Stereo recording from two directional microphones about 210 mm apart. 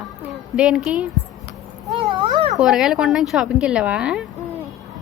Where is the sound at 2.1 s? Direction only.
25° right (ahead or behind).